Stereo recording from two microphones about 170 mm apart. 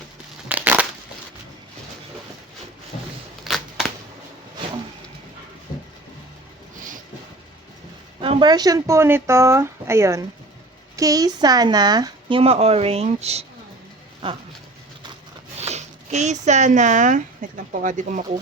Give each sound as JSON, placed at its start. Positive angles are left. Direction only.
{"t": 0.4, "sound": "crushing", "side_deg": -10}
{"t": 3.4, "sound": "a sound", "side_deg": 0}
{"t": 8.2, "sound": "speech", "side_deg": -30}
{"t": 12.4, "sound": "speech", "side_deg": -35}
{"t": 15.5, "sound": "speech", "side_deg": -40}